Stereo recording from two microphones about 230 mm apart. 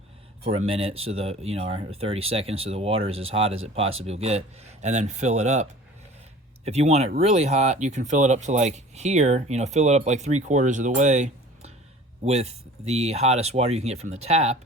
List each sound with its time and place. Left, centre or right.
0.5 s speech: right
6.7 s speech: right